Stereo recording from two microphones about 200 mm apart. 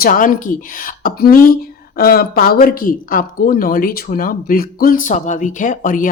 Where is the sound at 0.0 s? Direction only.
40° left (ahead or behind).